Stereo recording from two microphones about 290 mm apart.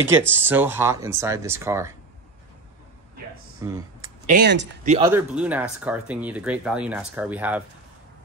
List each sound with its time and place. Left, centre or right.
0.4 s speech: centre
3.6 s a sound: centre
4.3 s speech: right
4.8 s speech: centre
5.1 s speech: centre